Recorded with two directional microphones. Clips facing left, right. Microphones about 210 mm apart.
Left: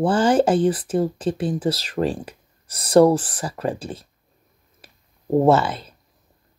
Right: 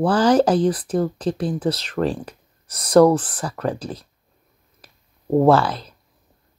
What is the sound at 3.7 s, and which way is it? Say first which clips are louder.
Speech: right 1 dB; 30° left (ahead or behind).